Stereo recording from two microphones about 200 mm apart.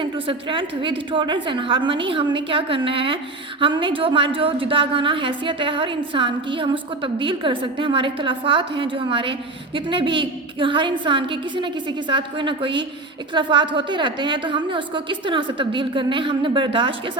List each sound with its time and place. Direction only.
0.0 s a woman's voice: 25° right (ahead or behind)